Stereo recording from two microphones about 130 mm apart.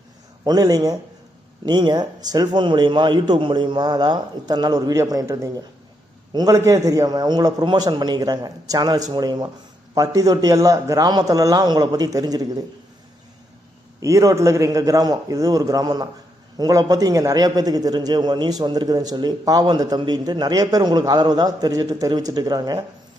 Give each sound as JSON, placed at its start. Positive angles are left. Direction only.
{"t": 0.4, "sound": "a man's voice", "side_deg": -30}
{"t": 14.0, "sound": "a man's voice", "side_deg": -25}